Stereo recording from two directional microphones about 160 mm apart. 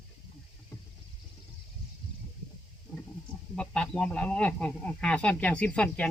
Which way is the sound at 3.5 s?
5° left (ahead or behind).